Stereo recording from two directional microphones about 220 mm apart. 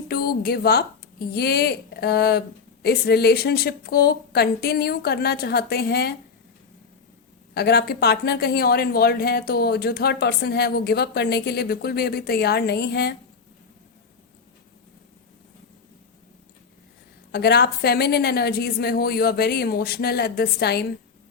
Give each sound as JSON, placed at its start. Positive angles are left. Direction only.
{"t": 0.1, "sound": "speech", "side_deg": 45}
{"t": 7.5, "sound": "speech", "side_deg": 45}
{"t": 17.3, "sound": "speech", "side_deg": 45}